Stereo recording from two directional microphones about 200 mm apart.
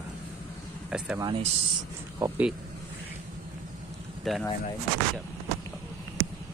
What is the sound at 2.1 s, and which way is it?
Speech, 15° right (ahead or behind).